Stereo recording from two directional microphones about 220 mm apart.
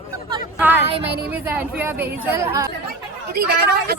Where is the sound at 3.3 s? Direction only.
45° right (ahead or behind).